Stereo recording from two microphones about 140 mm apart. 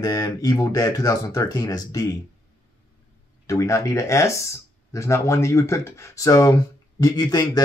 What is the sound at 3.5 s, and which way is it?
Speech, 20° left (ahead or behind).